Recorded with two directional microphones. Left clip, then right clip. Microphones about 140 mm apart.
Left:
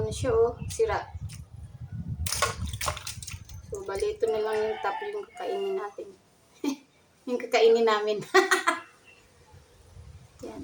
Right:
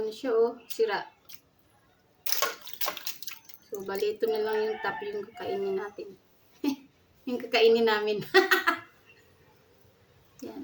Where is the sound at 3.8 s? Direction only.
50° right (ahead or behind).